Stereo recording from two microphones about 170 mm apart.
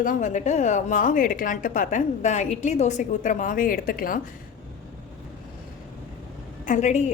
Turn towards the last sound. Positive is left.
turn(degrees=45)  # may be behind; listen again after turning